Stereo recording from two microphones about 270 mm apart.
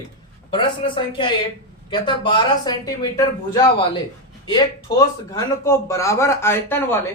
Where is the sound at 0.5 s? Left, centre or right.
Centre.